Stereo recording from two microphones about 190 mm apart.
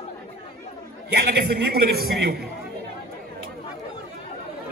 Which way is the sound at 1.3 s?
55° right (ahead or behind).